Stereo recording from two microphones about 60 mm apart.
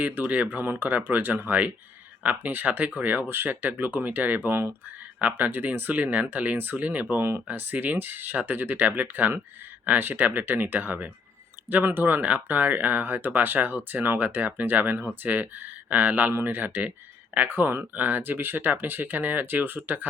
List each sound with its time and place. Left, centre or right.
0.0 s speech: right